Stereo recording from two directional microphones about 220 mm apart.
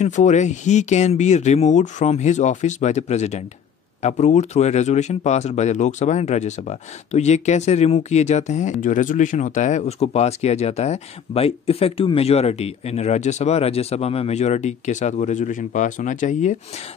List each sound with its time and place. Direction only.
0.0 s speech: 30° left (ahead or behind)